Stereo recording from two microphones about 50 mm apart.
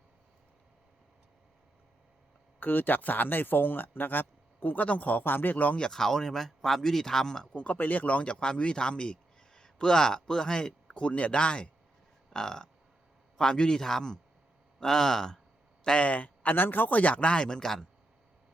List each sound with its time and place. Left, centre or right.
2.6 s speech: left
5.8 s speech: centre; by 7.8 s left
7.8 s speech: left
12.3 s burping: centre
13.3 s speech: centre
16.0 s speech: left; by 17.8 s centre